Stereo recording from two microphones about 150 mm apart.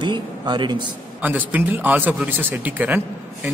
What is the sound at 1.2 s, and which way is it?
A man's voice, 10° right (ahead or behind).